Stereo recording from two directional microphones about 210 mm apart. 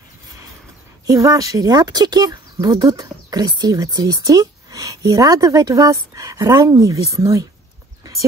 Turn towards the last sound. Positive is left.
turn(degrees=-15)  # may be behind; listen again after turning